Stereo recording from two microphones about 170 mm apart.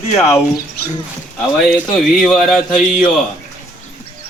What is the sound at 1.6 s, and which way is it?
Speech, centre (ahead or behind).